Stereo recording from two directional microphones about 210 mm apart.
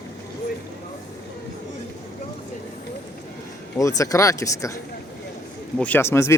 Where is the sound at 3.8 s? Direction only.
15° left (ahead or behind).